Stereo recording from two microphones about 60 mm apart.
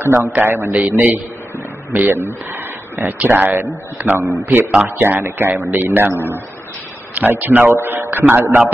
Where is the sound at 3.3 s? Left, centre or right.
Right.